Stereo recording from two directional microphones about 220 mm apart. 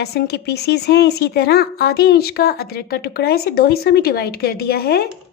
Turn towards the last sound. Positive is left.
turn(degrees=45)  # may be behind; listen again after turning